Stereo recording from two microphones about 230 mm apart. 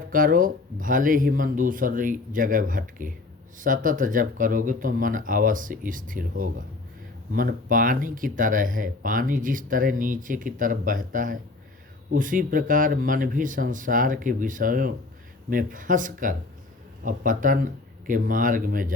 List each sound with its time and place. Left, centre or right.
0.1 s speech: right